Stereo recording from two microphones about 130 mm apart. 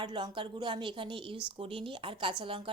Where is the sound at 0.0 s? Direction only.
40° right (ahead or behind).